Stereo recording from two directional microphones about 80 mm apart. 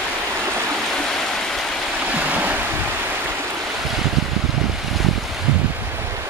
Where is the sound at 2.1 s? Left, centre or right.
Centre.